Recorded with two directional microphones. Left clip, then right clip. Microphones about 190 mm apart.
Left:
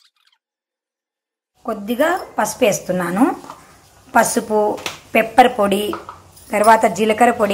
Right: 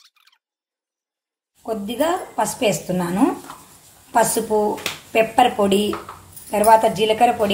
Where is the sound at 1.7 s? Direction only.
15° left (ahead or behind).